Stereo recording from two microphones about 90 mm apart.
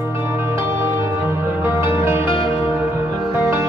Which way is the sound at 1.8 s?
25° right (ahead or behind).